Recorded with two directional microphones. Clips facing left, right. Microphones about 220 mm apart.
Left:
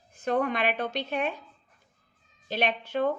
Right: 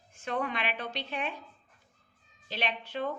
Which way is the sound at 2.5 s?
50° left (ahead or behind).